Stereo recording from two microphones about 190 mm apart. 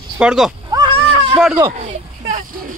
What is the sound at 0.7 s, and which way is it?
Goat, 20° right (ahead or behind).